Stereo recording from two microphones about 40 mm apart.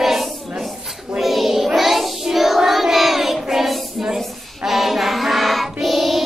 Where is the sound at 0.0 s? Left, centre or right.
Centre.